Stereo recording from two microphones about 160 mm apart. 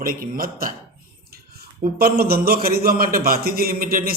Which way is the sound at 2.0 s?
75° right (ahead or behind).